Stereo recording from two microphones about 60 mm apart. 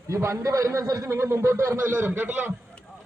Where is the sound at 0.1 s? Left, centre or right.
Right.